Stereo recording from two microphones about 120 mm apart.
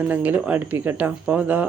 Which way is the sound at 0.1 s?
15° right (ahead or behind).